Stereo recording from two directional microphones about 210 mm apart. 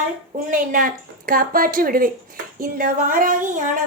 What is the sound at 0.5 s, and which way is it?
Speech, 40° right (ahead or behind).